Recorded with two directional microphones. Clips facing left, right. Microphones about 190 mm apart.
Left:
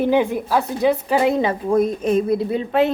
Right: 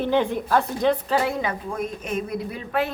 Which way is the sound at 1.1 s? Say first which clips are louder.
Left 6 dB; 20° left (ahead or behind).